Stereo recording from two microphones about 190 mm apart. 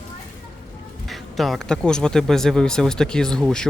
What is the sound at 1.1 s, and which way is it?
Speech, centre (ahead or behind).